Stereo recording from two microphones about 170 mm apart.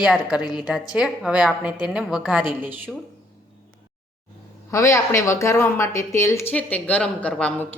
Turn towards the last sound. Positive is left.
turn(degrees=5)  # may be behind; listen again after turning